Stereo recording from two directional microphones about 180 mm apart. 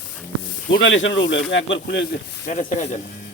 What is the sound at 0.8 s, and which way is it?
Speech, 90° left.